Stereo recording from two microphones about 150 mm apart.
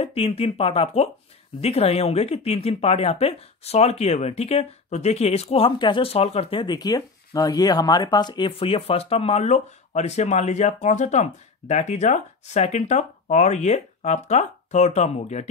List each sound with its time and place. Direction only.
0.0 s speech: 40° left (ahead or behind)